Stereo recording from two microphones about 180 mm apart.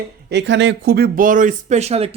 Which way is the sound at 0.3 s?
80° right.